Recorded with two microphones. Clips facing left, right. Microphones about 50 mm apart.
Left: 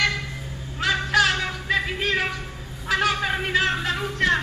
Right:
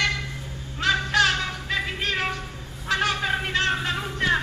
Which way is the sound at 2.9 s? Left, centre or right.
Centre.